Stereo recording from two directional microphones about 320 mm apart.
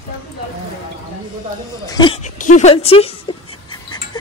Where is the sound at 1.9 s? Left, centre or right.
Centre.